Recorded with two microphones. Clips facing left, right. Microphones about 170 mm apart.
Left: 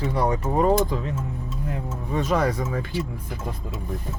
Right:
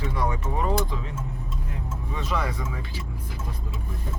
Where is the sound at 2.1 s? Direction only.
45° left (ahead or behind).